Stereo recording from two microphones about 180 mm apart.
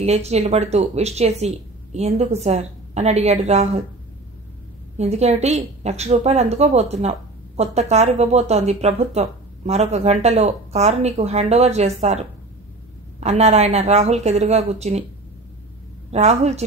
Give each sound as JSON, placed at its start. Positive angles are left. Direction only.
{"t": 0.0, "sound": "a woman's voice", "side_deg": -35}
{"t": 4.9, "sound": "a woman's voice", "side_deg": -35}
{"t": 16.1, "sound": "a woman's voice", "side_deg": -40}